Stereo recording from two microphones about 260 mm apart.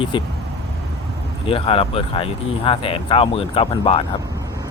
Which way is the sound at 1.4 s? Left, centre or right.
Left.